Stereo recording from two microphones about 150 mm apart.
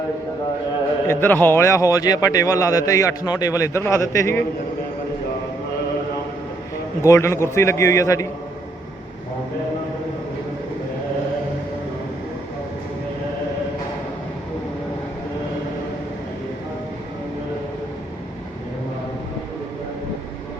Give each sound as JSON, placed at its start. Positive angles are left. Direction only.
{"t": 1.0, "sound": "a man's voice", "side_deg": 15}
{"t": 7.0, "sound": "a man's voice", "side_deg": 20}